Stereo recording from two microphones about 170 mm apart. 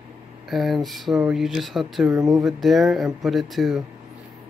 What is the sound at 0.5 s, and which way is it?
Speech, centre (ahead or behind).